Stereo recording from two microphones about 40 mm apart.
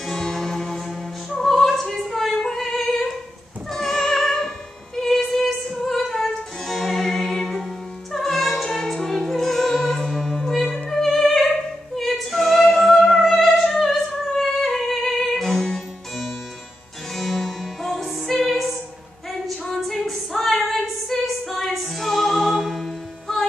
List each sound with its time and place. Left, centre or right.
0.0 s music: centre
1.4 s opera: centre
3.7 s music: centre
17.1 s music: centre
19.9 s female singing: centre